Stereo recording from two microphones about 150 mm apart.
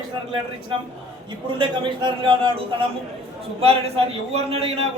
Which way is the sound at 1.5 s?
30° right (ahead or behind).